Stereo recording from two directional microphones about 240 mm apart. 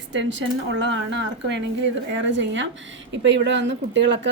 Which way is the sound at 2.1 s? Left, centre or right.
Right.